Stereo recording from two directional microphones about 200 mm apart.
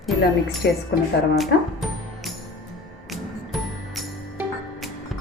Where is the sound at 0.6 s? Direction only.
60° left (ahead or behind).